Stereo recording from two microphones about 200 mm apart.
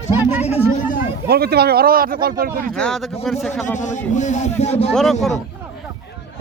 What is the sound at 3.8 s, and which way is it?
Speech, 40° left (ahead or behind).